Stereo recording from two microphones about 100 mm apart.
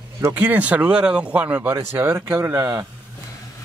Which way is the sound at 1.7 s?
25° right (ahead or behind).